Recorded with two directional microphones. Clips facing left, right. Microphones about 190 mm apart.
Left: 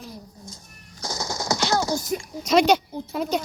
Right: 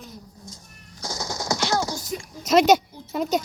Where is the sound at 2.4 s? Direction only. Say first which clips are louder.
Right 2 dB; 5° right (ahead or behind).